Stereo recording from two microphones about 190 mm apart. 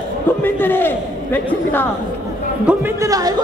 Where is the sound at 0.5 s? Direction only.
10° left (ahead or behind).